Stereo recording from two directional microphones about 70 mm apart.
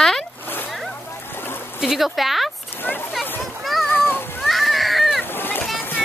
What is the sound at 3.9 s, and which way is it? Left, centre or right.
Splash, left.